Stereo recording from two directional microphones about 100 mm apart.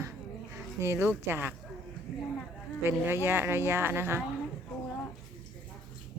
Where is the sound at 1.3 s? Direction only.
20° right (ahead or behind).